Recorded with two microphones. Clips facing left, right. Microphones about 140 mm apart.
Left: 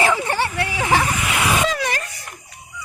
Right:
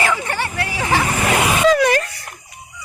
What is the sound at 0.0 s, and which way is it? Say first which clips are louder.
Vehicle: left 2 dB; 25° left (ahead or behind).